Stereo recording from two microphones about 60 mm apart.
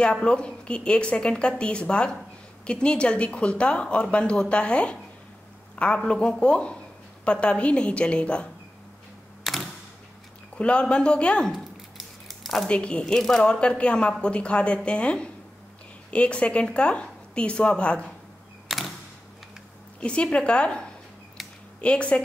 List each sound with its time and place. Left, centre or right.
0.0 s a woman's voice: centre
6.0 s a woman's voice: centre
9.4 s typewriter: centre
10.6 s a woman's voice: centre
11.5 s a sound: centre
12.6 s speech: centre
13.0 s a woman's voice: centre
18.7 s camera: centre
20.0 s a woman's voice: centre